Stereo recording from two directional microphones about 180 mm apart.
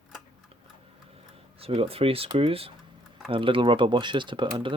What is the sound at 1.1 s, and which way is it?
Speech, 35° right (ahead or behind).